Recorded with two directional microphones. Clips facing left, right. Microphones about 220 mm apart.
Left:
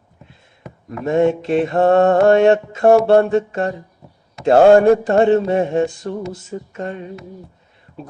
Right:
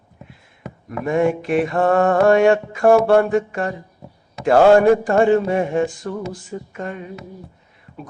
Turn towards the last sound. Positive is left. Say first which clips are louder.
# left 2 dB
turn(degrees=25)  # may be behind; listen again after turning